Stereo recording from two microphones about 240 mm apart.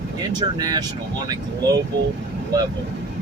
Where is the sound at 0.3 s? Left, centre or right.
Centre.